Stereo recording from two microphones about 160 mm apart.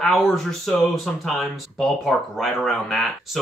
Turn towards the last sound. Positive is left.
turn(degrees=0)  # may be behind; listen again after turning